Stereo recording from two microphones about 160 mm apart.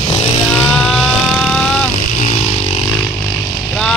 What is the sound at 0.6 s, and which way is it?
Vehicle, 5° left (ahead or behind).